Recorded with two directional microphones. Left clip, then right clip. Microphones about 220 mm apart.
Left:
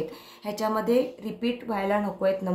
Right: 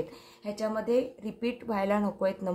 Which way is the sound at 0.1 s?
10° right (ahead or behind).